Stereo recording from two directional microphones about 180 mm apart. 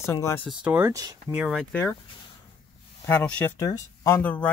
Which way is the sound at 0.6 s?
10° right (ahead or behind).